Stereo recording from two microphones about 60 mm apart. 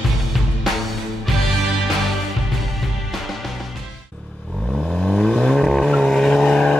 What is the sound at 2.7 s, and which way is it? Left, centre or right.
Music, centre.